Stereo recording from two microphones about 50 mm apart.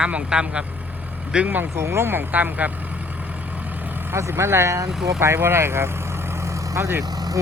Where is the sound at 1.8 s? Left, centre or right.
Right.